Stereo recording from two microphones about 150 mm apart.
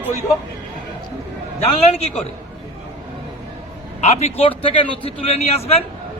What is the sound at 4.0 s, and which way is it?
A man's voice, 45° left (ahead or behind).